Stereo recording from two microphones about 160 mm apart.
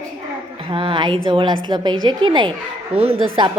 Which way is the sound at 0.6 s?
30° right (ahead or behind).